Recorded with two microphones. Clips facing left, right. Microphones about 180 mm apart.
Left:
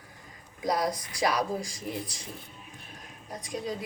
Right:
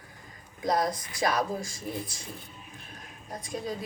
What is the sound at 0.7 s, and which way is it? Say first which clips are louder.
Speech: right 1 dB; 50° right (ahead or behind).